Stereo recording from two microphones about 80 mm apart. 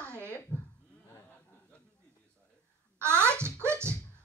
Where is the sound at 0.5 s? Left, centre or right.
Centre.